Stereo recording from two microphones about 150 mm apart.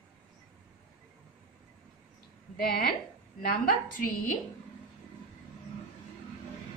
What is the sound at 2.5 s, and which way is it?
Speech, 90° left.